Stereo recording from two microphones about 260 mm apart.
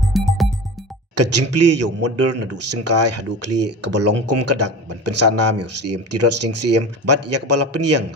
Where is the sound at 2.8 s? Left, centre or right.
Right.